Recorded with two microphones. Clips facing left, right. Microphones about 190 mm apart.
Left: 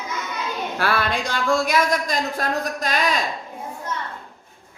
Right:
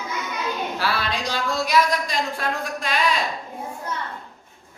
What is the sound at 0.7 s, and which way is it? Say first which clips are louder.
Speech: left 3 dB; 55° left (ahead or behind).